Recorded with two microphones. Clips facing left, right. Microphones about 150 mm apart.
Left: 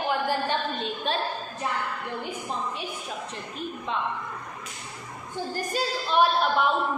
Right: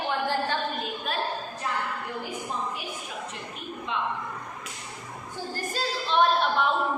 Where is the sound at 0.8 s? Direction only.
30° left (ahead or behind).